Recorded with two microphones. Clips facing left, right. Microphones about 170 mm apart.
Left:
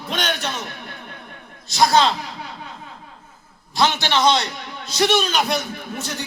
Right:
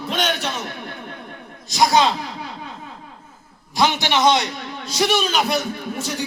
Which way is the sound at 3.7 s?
15° right (ahead or behind).